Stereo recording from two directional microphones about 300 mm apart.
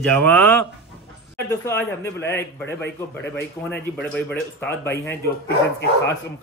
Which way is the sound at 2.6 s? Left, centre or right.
Left.